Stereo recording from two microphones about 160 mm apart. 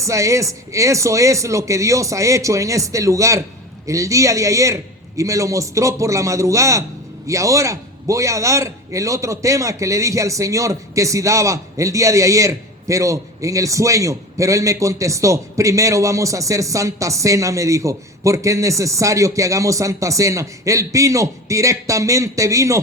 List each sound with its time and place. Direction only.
0.0 s a man's voice: 20° right (ahead or behind)